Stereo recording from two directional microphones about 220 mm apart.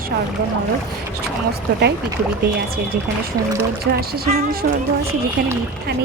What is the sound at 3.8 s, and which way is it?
Speech, 45° right (ahead or behind).